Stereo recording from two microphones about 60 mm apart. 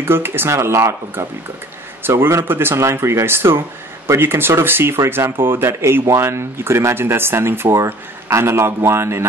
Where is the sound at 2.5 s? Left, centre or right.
Right.